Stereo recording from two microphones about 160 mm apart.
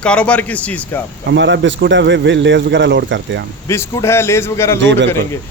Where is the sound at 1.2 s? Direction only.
90° right.